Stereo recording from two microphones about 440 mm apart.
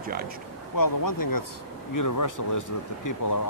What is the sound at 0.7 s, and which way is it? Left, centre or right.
Speech, left.